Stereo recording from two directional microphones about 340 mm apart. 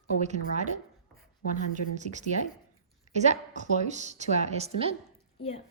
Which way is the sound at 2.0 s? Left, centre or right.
Right.